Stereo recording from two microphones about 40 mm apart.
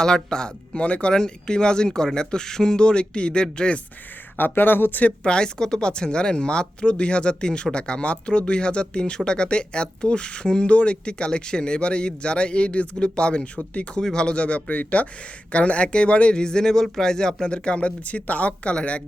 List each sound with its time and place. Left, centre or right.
0.0 s speech: centre
4.4 s speech: left
5.2 s speech: left
14.0 s speech: centre